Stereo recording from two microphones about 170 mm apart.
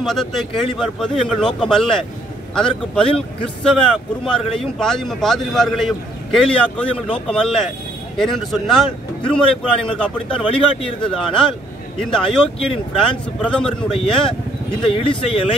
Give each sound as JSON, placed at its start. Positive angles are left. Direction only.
{"t": 0.0, "sound": "speech", "side_deg": 0}
{"t": 10.5, "sound": "speech", "side_deg": 30}
{"t": 12.1, "sound": "speech", "side_deg": 5}
{"t": 14.7, "sound": "speech", "side_deg": 30}